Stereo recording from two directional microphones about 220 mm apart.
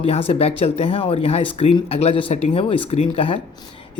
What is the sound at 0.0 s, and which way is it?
Speech, 25° left (ahead or behind).